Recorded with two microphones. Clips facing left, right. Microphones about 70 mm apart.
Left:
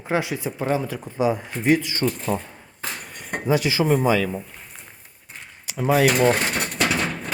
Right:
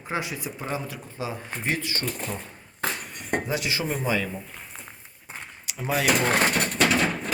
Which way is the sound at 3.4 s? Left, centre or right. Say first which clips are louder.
Left 8 dB; left.